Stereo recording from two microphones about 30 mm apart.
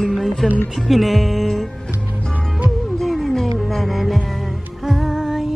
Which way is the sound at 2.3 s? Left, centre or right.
Right.